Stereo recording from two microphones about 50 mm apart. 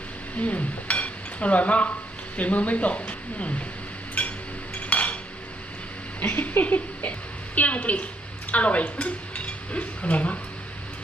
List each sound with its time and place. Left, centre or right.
0.3 s speech: left
4.2 s a sound: left
4.7 s chink: left
6.5 s a sound: left
7.5 s speech: left
8.4 s dishes: left